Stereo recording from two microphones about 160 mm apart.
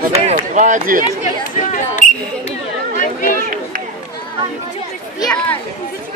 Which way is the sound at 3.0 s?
60° left (ahead or behind).